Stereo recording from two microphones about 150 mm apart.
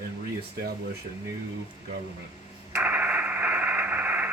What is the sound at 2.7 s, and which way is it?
Radio, 10° right (ahead or behind).